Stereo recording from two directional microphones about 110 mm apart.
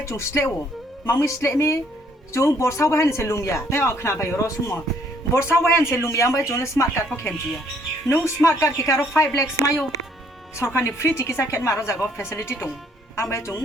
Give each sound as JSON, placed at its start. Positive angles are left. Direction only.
{"t": 0.0, "sound": "speech", "side_deg": 25}
{"t": 8.1, "sound": "speech", "side_deg": 25}